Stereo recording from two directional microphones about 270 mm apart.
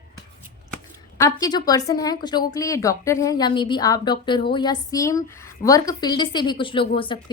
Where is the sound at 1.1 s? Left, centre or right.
Centre.